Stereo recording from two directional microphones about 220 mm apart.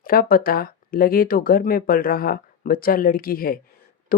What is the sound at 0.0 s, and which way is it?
Speech, 40° left (ahead or behind).